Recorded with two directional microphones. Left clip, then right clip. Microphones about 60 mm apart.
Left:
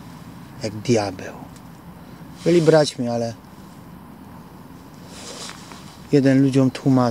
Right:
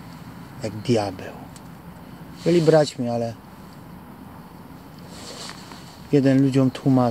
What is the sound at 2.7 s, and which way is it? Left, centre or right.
Speech, left.